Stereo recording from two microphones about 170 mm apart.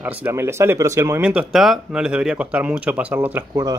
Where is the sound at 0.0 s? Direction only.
10° right (ahead or behind).